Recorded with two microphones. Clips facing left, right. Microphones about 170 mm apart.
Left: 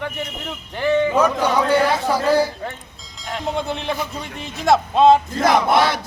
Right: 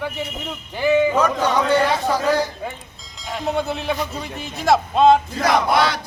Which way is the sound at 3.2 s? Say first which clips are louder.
Right 1 dB; centre (ahead or behind).